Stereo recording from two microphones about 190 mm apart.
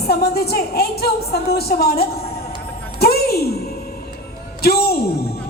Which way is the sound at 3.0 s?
55° left (ahead or behind).